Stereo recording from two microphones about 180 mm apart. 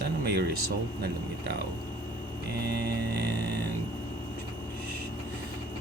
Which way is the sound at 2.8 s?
65° right (ahead or behind).